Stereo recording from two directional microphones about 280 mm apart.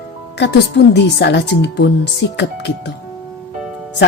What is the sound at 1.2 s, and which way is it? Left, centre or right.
Speech, left.